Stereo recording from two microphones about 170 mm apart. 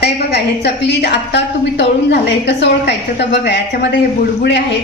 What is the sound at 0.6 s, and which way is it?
A woman's voice, 85° left.